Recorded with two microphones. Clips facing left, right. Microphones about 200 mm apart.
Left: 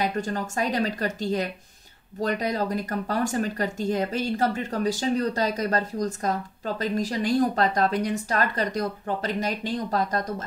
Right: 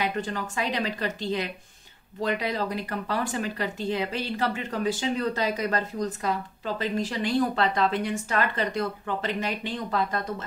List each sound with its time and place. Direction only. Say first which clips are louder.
0.0 s speech: left 2 dB; 45° left (ahead or behind)